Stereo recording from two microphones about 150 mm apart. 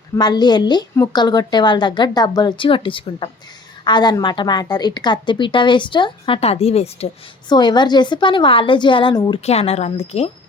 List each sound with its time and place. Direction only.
0.2 s a woman's voice: 30° left (ahead or behind)
7.5 s a woman's voice: 30° left (ahead or behind)
9.4 s a woman's voice: 45° left (ahead or behind)